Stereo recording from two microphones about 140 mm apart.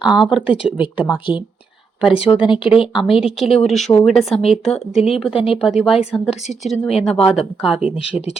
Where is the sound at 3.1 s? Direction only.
40° left (ahead or behind).